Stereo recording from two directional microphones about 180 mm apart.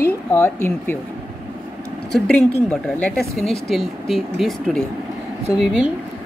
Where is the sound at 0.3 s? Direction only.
10° left (ahead or behind).